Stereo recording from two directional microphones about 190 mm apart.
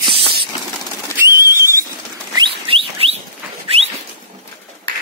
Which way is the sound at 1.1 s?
15° right (ahead or behind).